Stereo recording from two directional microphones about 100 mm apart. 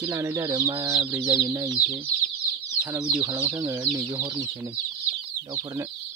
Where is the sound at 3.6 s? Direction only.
40° right (ahead or behind).